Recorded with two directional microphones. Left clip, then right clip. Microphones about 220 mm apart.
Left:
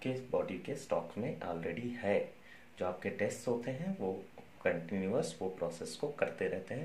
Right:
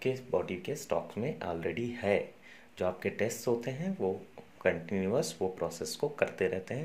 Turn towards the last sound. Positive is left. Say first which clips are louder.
# right 4 dB
turn(degrees=-45)  # may be behind; listen again after turning